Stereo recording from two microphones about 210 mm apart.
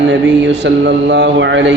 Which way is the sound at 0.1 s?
55° right (ahead or behind).